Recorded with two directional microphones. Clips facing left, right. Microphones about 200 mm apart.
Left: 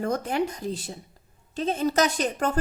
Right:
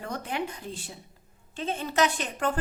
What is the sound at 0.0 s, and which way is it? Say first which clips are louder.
A woman's voice: left 7 dB; 45° left (ahead or behind).